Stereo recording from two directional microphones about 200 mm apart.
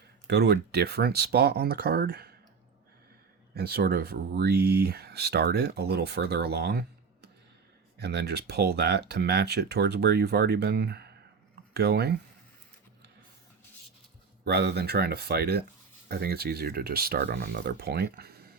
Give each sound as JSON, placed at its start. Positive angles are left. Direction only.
{"t": 0.3, "sound": "speech", "side_deg": -55}
{"t": 3.5, "sound": "speech", "side_deg": -50}
{"t": 14.4, "sound": "speech", "side_deg": -55}